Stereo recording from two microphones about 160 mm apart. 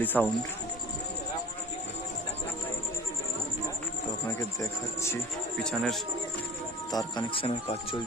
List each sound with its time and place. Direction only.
0.0 s speech: 10° left (ahead or behind)
4.4 s speech: 15° left (ahead or behind)
5.6 s speech: centre (ahead or behind)
6.9 s speech: 30° left (ahead or behind)